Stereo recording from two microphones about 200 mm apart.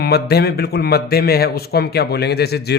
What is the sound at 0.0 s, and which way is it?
A man's voice, 50° left (ahead or behind).